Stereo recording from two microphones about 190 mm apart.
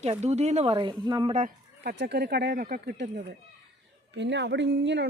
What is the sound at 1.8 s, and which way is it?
Speech, 60° right (ahead or behind).